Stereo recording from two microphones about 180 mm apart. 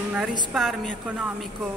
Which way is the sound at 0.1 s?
5° right (ahead or behind).